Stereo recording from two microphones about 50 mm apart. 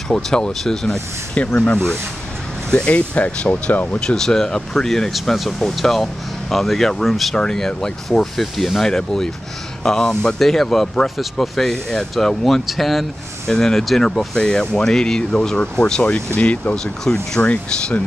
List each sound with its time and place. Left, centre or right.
0.1 s speech: centre
1.3 s speech: left
4.0 s speech: centre
7.3 s speech: centre; by 16.7 s left
16.7 s speech: centre
17.4 s speech: left